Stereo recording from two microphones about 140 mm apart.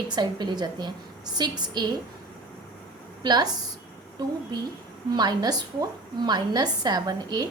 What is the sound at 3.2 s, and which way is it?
Speech, 30° right (ahead or behind).